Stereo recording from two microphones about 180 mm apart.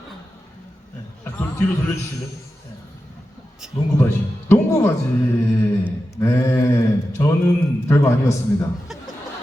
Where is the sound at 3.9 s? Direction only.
15° left (ahead or behind).